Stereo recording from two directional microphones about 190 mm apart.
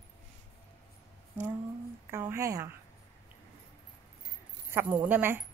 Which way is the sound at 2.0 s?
15° right (ahead or behind).